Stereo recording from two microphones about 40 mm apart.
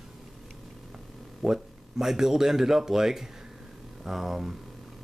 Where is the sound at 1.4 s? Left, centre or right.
Centre.